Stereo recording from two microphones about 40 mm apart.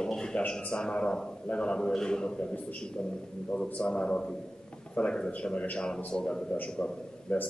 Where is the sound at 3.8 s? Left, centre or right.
Left.